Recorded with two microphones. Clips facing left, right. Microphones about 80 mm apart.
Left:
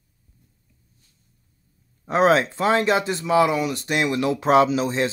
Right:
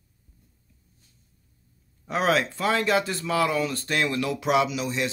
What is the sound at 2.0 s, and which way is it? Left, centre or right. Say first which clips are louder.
Speech: left 6 dB; left.